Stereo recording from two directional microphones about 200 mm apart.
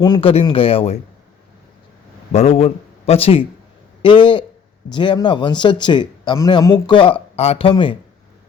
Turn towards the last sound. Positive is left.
turn(degrees=25)  # may be behind; listen again after turning